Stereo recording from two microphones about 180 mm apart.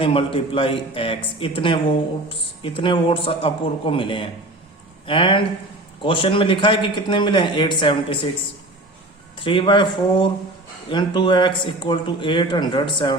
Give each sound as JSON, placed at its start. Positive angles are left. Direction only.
{"t": 0.0, "sound": "a man's voice", "side_deg": 30}
{"t": 9.4, "sound": "a man's voice", "side_deg": 25}